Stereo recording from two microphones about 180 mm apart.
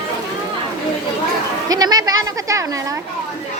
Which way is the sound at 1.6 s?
20° right (ahead or behind).